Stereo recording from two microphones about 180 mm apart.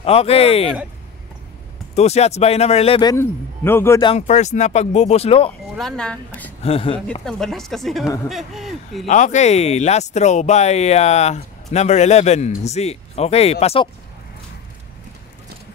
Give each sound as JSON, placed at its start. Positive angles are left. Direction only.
{"t": 0.0, "sound": "speech", "side_deg": 35}
{"t": 2.0, "sound": "speech", "side_deg": 35}
{"t": 4.3, "sound": "speech", "side_deg": 40}
{"t": 5.8, "sound": "speech", "side_deg": 5}
{"t": 6.6, "sound": "speech", "side_deg": 30}
{"t": 7.2, "sound": "speech", "side_deg": 5}
{"t": 9.0, "sound": "speech", "side_deg": 40}